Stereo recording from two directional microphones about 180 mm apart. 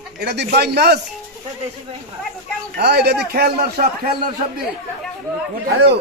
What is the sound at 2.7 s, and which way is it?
A man's voice, 65° right (ahead or behind).